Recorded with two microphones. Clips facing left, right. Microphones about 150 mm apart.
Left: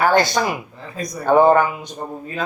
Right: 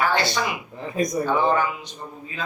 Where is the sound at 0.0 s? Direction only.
45° left (ahead or behind).